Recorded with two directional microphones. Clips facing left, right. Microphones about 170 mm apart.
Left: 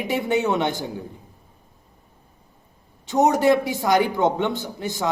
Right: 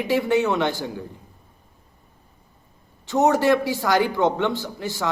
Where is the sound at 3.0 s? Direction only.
20° left (ahead or behind).